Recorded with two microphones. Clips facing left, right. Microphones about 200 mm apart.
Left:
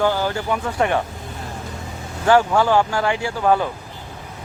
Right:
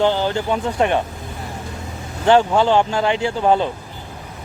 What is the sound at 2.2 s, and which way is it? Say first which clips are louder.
Speech: right 2 dB; 20° right (ahead or behind).